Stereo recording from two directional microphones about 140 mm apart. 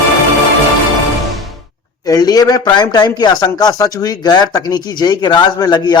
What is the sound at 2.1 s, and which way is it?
A man's voice, 30° left (ahead or behind).